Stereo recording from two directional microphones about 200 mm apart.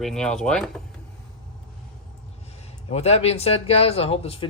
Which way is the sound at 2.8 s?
30° left (ahead or behind).